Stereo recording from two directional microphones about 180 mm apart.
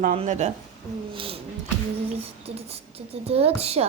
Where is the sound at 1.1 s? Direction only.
30° right (ahead or behind).